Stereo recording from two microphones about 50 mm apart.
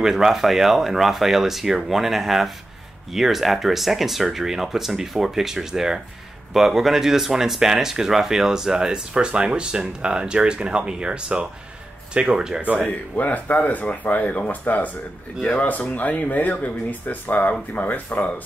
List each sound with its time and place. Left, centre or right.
0.0 s speech: centre
13.1 s speech: left